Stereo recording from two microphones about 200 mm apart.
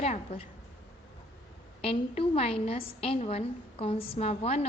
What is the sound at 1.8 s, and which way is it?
A woman's voice, 30° left (ahead or behind).